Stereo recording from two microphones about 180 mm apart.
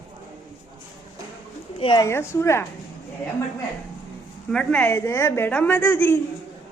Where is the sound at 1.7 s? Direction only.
30° left (ahead or behind).